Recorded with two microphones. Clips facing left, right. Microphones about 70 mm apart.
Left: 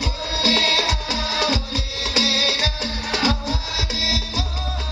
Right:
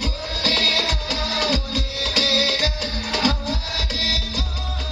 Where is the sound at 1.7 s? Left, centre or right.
Right.